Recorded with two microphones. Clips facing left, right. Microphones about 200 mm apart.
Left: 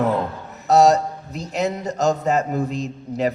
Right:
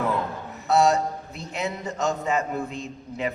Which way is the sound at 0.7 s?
40° left (ahead or behind).